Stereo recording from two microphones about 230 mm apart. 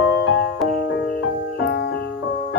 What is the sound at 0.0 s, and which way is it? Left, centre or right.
Music, left.